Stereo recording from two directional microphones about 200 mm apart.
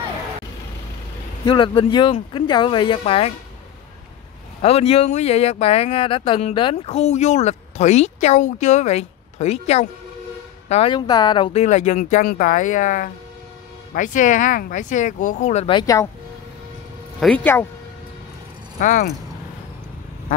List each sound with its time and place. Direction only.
1.4 s speech: 25° left (ahead or behind)
4.6 s speech: 30° left (ahead or behind)
17.2 s speech: 5° left (ahead or behind)
18.8 s speech: 40° left (ahead or behind)